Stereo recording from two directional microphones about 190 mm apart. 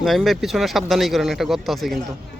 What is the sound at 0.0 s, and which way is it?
Speech, centre (ahead or behind).